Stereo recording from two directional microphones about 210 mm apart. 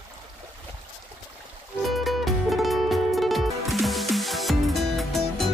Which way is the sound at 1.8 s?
Centre (ahead or behind).